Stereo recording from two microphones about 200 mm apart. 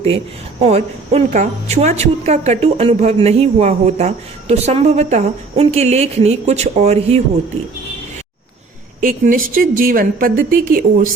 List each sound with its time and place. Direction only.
0.6 s a woman's voice: 30° right (ahead or behind)
9.0 s a woman's voice: 40° right (ahead or behind)